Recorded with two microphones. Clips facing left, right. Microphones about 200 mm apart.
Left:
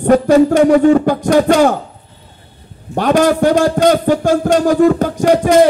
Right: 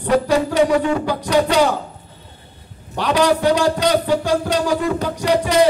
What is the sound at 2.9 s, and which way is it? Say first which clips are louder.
A man's voice: left 5 dB; 50° left (ahead or behind).